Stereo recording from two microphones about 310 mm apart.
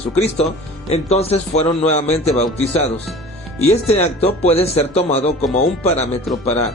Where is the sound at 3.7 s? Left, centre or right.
Centre.